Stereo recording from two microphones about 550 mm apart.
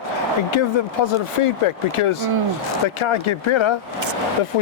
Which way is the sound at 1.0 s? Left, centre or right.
Left.